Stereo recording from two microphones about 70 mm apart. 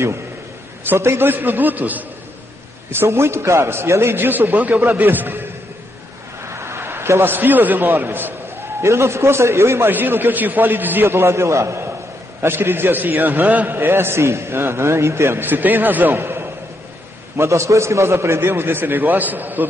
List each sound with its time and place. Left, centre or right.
0.8 s a man's voice: right
2.9 s a man's voice: right
6.4 s a sound: right
8.8 s a man's voice: right
15.4 s a man's voice: right
17.4 s a man's voice: right